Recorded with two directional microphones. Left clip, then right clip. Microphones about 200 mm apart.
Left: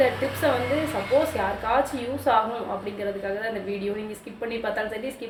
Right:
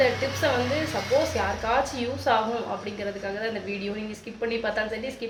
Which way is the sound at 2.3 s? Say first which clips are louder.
Left 2 dB; 5° left (ahead or behind).